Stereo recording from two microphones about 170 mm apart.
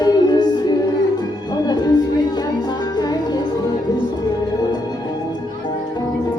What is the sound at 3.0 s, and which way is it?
Music, 25° left (ahead or behind).